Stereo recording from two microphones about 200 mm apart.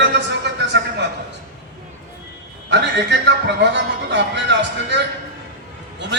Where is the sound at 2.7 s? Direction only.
60° right (ahead or behind).